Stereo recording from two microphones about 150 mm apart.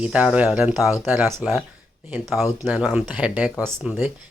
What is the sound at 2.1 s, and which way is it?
Speech, 5° right (ahead or behind).